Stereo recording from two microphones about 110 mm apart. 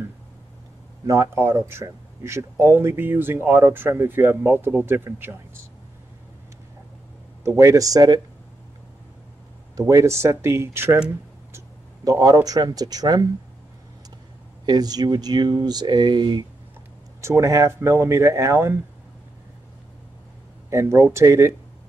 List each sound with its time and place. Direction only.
1.0 s speech: 25° right (ahead or behind)
7.4 s speech: 30° right (ahead or behind)
9.8 s speech: 30° right (ahead or behind)
11.5 s speech: 35° right (ahead or behind)
14.7 s speech: 35° right (ahead or behind)
17.2 s speech: 25° right (ahead or behind)
20.7 s speech: 25° right (ahead or behind)